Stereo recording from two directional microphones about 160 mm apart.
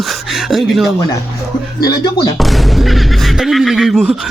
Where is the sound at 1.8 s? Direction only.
25° left (ahead or behind).